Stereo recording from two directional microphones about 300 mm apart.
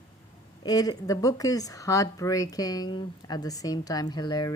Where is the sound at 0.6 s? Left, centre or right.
Centre.